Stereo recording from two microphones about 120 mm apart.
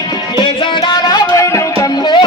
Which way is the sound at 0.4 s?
35° left (ahead or behind).